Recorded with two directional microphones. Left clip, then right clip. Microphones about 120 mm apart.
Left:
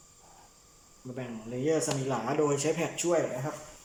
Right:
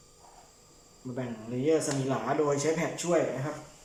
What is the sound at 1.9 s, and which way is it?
Speech, 15° left (ahead or behind).